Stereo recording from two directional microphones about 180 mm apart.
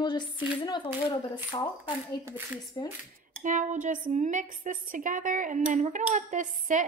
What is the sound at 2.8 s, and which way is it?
Speech, 20° left (ahead or behind).